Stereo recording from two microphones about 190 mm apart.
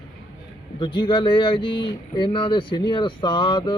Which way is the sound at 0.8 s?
25° left (ahead or behind).